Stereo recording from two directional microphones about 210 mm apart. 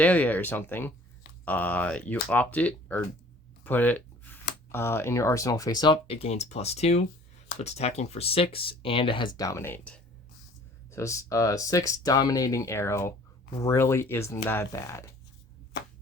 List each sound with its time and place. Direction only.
0.0 s speech: 5° left (ahead or behind)